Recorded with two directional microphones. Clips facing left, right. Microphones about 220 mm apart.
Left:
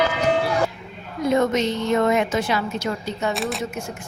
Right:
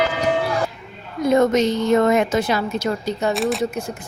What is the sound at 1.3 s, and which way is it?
A woman's voice, 40° right (ahead or behind).